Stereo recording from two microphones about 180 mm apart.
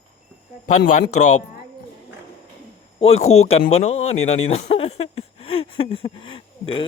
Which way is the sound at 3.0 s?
35° left (ahead or behind).